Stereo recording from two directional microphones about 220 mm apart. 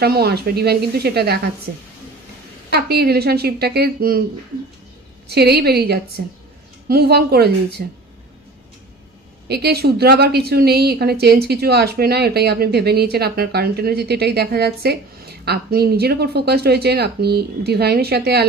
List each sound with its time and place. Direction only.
0.0 s a woman's voice: 45° right (ahead or behind)
2.7 s a woman's voice: 45° right (ahead or behind)
5.3 s a woman's voice: 45° right (ahead or behind)
9.5 s a woman's voice: 45° right (ahead or behind)